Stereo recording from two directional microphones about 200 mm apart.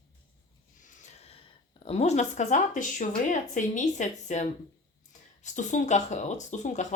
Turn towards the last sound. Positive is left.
turn(degrees=35)  # may be behind; listen again after turning